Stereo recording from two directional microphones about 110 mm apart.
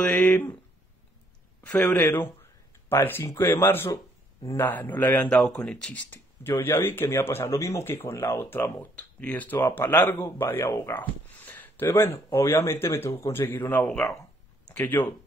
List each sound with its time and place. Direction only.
0.0 s speech: 10° left (ahead or behind)
1.6 s speech: 10° left (ahead or behind)
4.6 s speech: 15° left (ahead or behind)
5.3 s speech: 5° left (ahead or behind)